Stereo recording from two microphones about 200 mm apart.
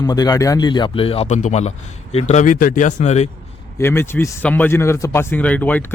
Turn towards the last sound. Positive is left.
turn(degrees=5)  # may be behind; listen again after turning